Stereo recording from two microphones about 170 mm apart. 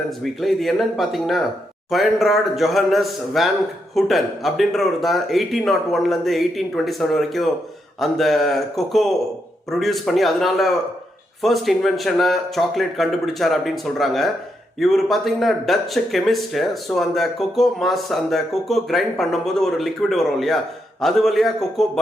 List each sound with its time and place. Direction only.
0.2 s speech: centre (ahead or behind)